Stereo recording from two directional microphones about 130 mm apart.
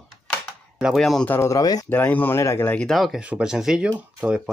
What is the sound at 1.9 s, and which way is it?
Speech, 15° left (ahead or behind).